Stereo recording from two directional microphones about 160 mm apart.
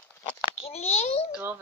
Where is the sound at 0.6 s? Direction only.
40° left (ahead or behind).